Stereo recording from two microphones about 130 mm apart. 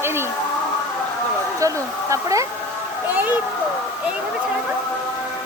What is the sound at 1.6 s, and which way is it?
Speech, 25° right (ahead or behind).